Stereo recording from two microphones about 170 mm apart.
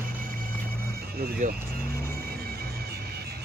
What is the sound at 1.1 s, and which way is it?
Vehicle, 60° right (ahead or behind).